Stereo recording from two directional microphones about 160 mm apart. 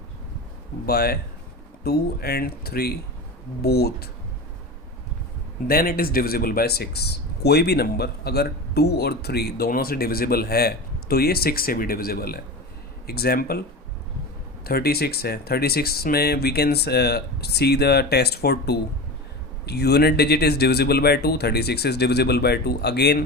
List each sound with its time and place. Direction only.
0.9 s speech: 75° left (ahead or behind)
5.6 s speech: 65° left (ahead or behind)
14.6 s speech: 75° left (ahead or behind)